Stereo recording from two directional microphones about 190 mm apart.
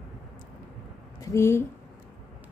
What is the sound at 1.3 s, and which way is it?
Speech, 15° left (ahead or behind).